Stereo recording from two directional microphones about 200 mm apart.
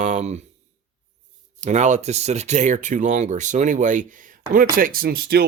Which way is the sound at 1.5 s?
35° right (ahead or behind).